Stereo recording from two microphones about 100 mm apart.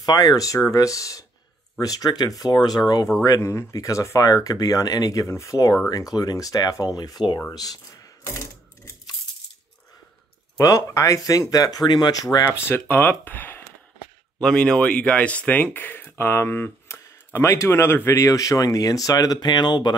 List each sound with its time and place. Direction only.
0.0 s speech: 40° left (ahead or behind)
3.3 s speech: 30° left (ahead or behind)
10.6 s speech: 35° left (ahead or behind)
12.6 s speech: 20° left (ahead or behind); by 19.9 s 45° left (ahead or behind)